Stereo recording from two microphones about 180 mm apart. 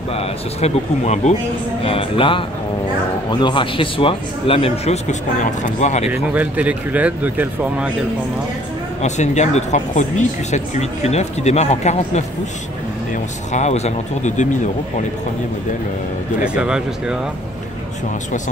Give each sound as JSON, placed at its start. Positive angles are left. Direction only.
{"t": 0.1, "sound": "speech", "side_deg": 35}
{"t": 6.1, "sound": "speech", "side_deg": -10}
{"t": 9.0, "sound": "speech", "side_deg": 40}
{"t": 13.5, "sound": "speech", "side_deg": 40}
{"t": 16.4, "sound": "speech", "side_deg": -5}